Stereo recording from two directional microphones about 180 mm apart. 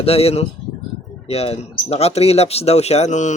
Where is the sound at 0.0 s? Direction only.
35° left (ahead or behind).